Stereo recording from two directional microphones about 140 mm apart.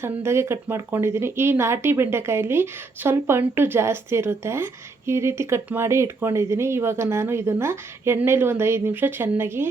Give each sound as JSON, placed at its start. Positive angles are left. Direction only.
{"t": 0.0, "sound": "speech", "side_deg": -20}